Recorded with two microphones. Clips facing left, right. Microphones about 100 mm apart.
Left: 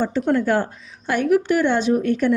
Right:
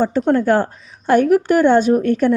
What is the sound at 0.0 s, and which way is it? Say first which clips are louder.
A woman's voice: right 4 dB; 45° right (ahead or behind).